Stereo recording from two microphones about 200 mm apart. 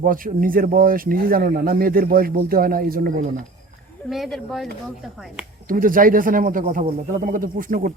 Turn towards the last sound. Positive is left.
turn(degrees=-45)  # may be behind; listen again after turning